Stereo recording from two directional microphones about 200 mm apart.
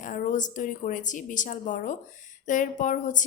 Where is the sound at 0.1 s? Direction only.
40° left (ahead or behind).